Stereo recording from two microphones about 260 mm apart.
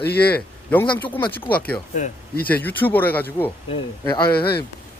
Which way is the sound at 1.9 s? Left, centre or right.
Left.